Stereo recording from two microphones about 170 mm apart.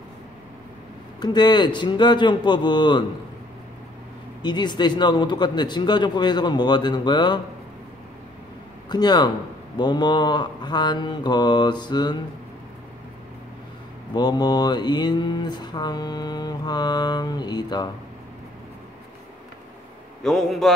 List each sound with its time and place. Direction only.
1.2 s mantra: 25° left (ahead or behind)
4.4 s mantra: 25° left (ahead or behind)
8.8 s mantra: 25° left (ahead or behind)
14.1 s mantra: 25° left (ahead or behind)
20.2 s a man's voice: centre (ahead or behind)